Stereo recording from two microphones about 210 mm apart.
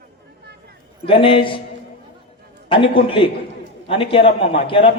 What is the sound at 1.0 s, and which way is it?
Speech, 25° left (ahead or behind).